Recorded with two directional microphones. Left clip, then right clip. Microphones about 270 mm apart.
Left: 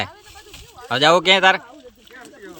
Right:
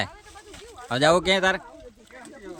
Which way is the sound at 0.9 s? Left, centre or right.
Centre.